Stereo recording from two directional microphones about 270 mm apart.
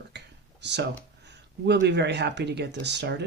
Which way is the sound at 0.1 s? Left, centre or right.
Right.